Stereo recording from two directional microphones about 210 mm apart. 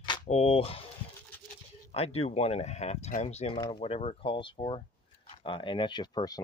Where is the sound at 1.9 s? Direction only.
30° left (ahead or behind).